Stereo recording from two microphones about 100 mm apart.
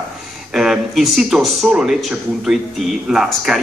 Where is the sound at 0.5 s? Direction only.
5° right (ahead or behind).